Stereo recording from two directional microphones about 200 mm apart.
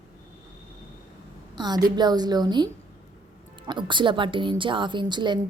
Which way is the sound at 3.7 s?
25° right (ahead or behind).